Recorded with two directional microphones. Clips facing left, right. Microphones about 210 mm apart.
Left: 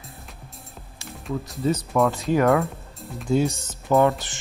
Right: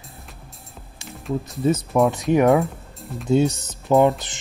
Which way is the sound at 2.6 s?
Centre (ahead or behind).